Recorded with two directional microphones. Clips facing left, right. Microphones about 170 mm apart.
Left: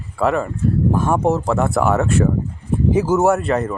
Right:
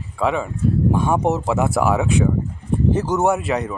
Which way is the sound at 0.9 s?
Centre (ahead or behind).